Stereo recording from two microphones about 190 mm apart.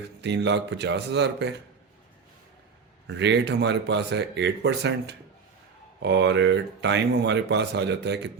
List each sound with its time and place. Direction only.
0.2 s speech: 65° right (ahead or behind)
3.2 s speech: 65° right (ahead or behind)